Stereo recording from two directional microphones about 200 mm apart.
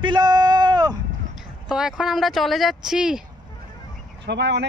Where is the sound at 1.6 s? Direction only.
5° right (ahead or behind).